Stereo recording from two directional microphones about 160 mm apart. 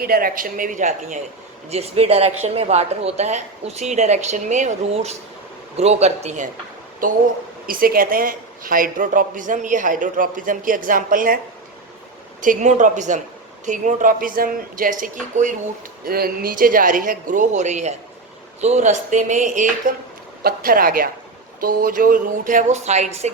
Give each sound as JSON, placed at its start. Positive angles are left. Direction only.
{"t": 0.0, "sound": "a woman's voice", "side_deg": -65}
{"t": 1.7, "sound": "speech", "side_deg": -40}
{"t": 7.7, "sound": "a woman's voice", "side_deg": -65}
{"t": 12.4, "sound": "a woman's voice", "side_deg": -50}
{"t": 16.0, "sound": "a woman's voice", "side_deg": -70}
{"t": 20.4, "sound": "a woman's voice", "side_deg": -65}